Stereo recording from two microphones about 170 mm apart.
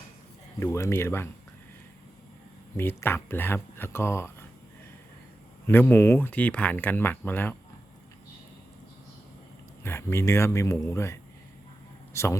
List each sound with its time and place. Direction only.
0.6 s speech: 15° left (ahead or behind)
2.7 s speech: 15° left (ahead or behind)
5.6 s speech: 15° left (ahead or behind)
9.8 s speech: 15° left (ahead or behind)